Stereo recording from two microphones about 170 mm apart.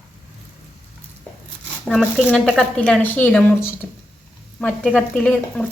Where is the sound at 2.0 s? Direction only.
5° left (ahead or behind).